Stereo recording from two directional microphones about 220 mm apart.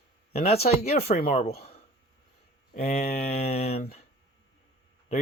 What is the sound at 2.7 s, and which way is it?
Speech, 30° left (ahead or behind).